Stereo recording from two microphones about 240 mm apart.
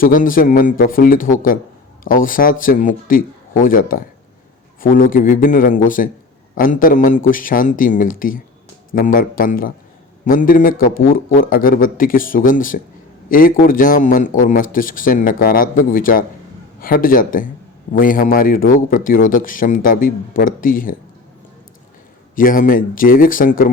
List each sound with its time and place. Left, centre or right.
0.0 s a man's voice: left
22.4 s a man's voice: left